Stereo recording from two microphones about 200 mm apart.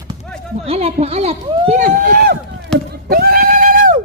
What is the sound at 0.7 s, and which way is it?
Speech, 30° right (ahead or behind).